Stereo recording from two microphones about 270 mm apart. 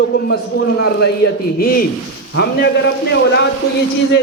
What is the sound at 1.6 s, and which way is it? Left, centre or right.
Speech, left.